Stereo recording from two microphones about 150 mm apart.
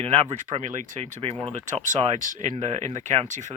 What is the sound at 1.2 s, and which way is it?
Speech, 40° right (ahead or behind).